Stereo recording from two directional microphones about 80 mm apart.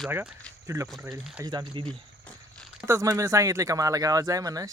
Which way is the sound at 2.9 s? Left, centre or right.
Right.